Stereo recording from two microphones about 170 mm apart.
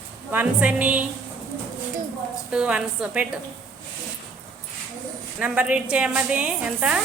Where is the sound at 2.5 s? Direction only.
5° right (ahead or behind).